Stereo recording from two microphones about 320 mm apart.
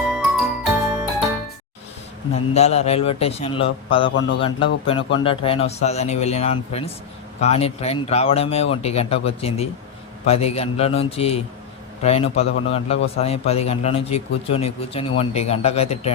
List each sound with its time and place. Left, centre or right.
0.1 s music: centre
2.6 s a man's voice: centre